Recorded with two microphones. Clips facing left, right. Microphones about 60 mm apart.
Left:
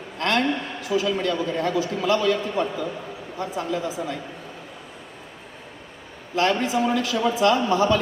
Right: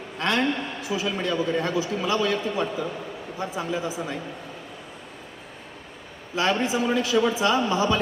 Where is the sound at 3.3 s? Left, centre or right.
Centre.